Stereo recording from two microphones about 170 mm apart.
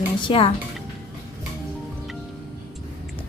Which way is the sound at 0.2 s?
30° left (ahead or behind).